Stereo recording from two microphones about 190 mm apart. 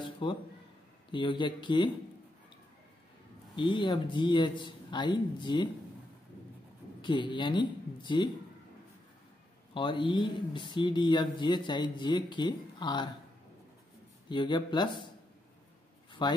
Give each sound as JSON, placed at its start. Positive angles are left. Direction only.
{"t": 0.0, "sound": "a man's voice", "side_deg": 25}
{"t": 3.5, "sound": "speech", "side_deg": 25}
{"t": 7.0, "sound": "speech", "side_deg": 25}
{"t": 9.8, "sound": "speech", "side_deg": 25}
{"t": 14.3, "sound": "speech", "side_deg": 25}
{"t": 16.1, "sound": "a sound", "side_deg": 25}